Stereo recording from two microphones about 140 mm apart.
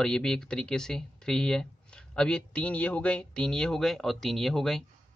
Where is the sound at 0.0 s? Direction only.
5° left (ahead or behind).